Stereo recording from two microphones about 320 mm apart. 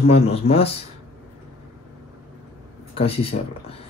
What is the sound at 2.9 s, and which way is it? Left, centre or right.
Speech, centre.